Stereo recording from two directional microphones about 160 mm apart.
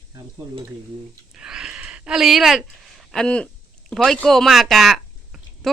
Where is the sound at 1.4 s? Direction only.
5° right (ahead or behind).